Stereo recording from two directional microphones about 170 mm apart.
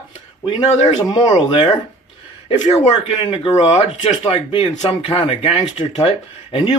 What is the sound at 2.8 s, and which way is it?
A man's voice, 35° left (ahead or behind).